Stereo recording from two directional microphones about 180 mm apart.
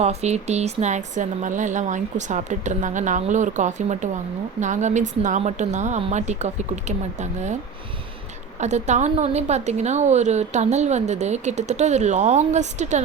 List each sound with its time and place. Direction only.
0.0 s a woman's voice: 35° right (ahead or behind)
8.6 s a woman's voice: 40° right (ahead or behind)